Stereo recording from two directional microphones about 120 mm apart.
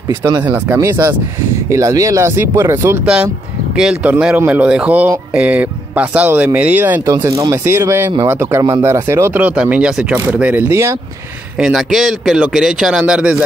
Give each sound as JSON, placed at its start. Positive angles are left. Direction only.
{"t": 0.1, "sound": "speech", "side_deg": -25}
{"t": 0.4, "sound": "speech", "side_deg": -15}
{"t": 3.7, "sound": "speech", "side_deg": -10}
{"t": 7.2, "sound": "speech", "side_deg": -25}
{"t": 11.5, "sound": "a man's voice", "side_deg": -5}